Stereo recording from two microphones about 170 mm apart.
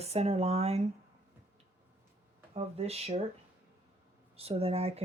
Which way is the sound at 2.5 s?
35° right (ahead or behind).